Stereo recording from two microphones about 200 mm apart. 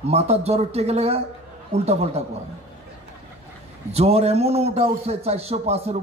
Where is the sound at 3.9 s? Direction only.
30° right (ahead or behind).